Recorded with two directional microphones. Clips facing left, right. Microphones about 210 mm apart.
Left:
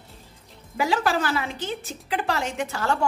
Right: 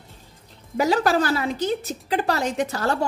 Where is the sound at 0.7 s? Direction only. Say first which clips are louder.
Right 4 dB; 40° right (ahead or behind).